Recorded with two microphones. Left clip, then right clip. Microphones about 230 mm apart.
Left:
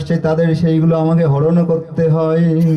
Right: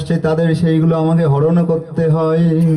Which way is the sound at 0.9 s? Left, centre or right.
Left.